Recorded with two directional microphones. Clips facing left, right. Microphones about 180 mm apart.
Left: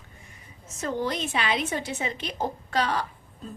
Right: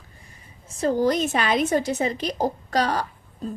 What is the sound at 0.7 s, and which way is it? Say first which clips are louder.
A woman's voice: right 8 dB; 35° right (ahead or behind).